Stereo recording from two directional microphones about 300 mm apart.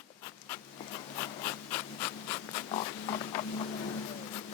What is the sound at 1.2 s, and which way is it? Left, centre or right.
Rub, centre.